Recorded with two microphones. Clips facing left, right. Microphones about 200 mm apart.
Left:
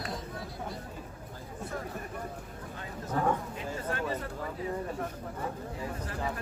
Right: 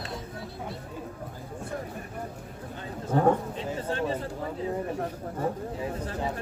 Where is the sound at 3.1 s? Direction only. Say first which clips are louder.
Right 7 dB; 30° right (ahead or behind).